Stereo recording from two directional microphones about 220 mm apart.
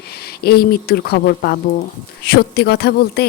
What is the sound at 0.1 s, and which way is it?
A woman's voice, 45° left (ahead or behind).